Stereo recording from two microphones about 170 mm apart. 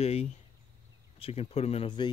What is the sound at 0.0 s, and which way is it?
Speech, 40° left (ahead or behind).